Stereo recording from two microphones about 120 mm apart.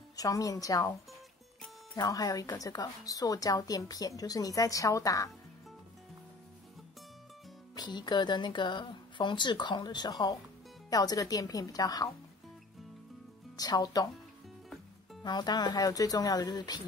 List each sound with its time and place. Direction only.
0.1 s speech: 30° left (ahead or behind)
2.0 s speech: 30° left (ahead or behind)
7.7 s speech: 35° left (ahead or behind)
13.6 s speech: 30° left (ahead or behind)
15.2 s speech: 35° left (ahead or behind)